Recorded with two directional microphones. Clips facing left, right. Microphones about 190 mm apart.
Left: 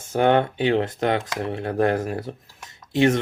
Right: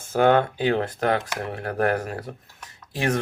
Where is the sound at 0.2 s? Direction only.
25° left (ahead or behind).